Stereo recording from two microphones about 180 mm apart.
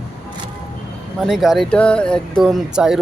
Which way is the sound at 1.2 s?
Centre (ahead or behind).